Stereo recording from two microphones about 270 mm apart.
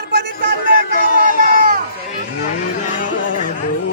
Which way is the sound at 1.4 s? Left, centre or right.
Right.